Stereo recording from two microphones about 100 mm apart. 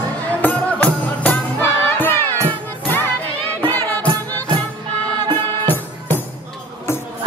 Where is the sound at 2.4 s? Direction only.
20° left (ahead or behind).